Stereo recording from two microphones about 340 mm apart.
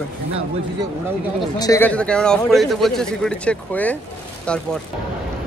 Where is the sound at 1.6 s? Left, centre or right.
Centre.